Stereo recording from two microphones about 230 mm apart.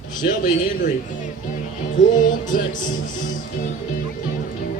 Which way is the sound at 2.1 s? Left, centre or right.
Left.